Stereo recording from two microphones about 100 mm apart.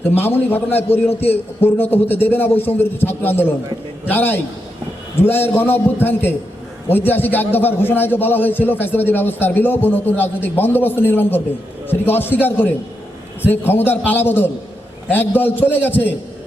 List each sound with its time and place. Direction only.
0.0 s a man's voice: 20° left (ahead or behind)